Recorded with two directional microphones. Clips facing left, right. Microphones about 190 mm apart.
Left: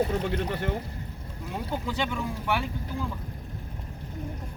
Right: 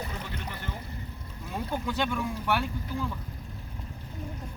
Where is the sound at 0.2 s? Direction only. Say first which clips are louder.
Left 10 dB; 65° left (ahead or behind).